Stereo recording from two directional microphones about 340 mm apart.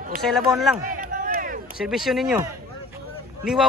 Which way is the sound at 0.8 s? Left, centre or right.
Right.